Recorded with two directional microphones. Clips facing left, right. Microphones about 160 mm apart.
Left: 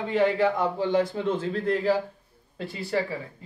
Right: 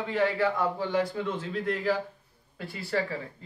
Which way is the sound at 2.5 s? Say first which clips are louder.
Left 3 dB; 20° left (ahead or behind).